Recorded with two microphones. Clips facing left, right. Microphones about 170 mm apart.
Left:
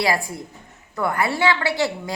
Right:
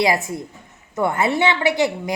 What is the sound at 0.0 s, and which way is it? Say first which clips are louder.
A woman's voice: right 3 dB; 20° right (ahead or behind).